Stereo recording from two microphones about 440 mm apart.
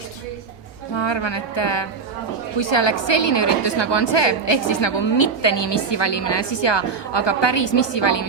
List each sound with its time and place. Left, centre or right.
0.9 s a woman's voice: left